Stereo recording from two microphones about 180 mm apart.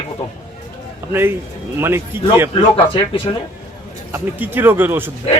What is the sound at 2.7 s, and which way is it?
Speech, 30° left (ahead or behind).